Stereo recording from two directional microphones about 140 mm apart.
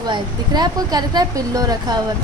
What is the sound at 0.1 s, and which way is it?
Speech, 30° right (ahead or behind).